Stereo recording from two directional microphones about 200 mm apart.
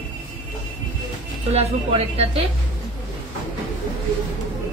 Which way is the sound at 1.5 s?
30° right (ahead or behind).